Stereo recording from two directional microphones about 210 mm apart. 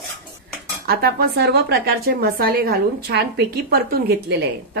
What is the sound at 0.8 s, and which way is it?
Speech, 45° right (ahead or behind).